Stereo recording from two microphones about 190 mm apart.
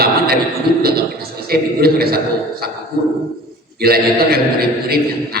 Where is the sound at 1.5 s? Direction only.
55° right (ahead or behind).